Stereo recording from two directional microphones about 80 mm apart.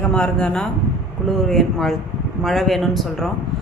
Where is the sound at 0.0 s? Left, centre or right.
Centre.